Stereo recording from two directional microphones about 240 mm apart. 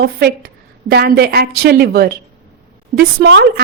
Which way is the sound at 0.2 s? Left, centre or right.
Right.